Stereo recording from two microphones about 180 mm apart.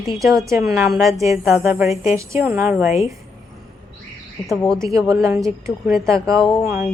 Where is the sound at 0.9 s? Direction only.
Centre (ahead or behind).